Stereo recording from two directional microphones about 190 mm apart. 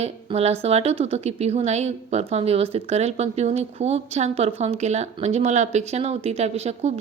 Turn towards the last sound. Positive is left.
turn(degrees=-35)  # may be behind; listen again after turning